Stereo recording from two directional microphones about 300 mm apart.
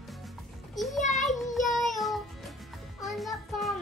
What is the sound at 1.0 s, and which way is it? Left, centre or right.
Child singing, left.